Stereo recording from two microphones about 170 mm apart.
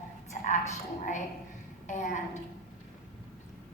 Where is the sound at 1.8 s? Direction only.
45° left (ahead or behind).